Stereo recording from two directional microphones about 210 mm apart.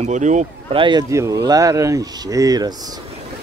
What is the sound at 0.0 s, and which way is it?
Speech, 35° right (ahead or behind).